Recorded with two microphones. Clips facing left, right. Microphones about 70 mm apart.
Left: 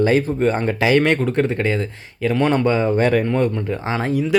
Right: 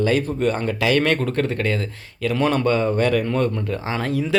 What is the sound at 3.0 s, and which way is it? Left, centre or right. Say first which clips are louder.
Speech: left 2 dB; left.